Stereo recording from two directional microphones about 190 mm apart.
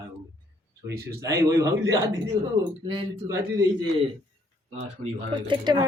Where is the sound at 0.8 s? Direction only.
15° right (ahead or behind).